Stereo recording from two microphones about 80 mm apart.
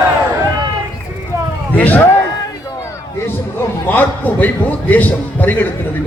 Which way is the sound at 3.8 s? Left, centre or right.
Left.